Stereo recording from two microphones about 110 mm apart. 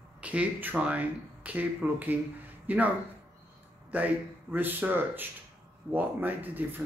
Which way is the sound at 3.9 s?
15° right (ahead or behind).